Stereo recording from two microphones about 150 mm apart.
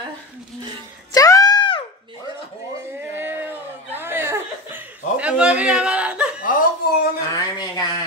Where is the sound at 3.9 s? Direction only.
15° right (ahead or behind).